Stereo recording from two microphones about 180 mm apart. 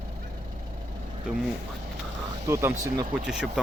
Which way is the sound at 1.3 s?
Centre (ahead or behind).